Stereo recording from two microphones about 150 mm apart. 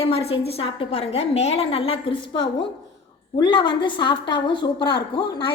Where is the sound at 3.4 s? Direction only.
30° left (ahead or behind).